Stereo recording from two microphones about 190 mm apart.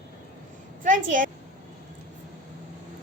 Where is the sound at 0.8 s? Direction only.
45° right (ahead or behind).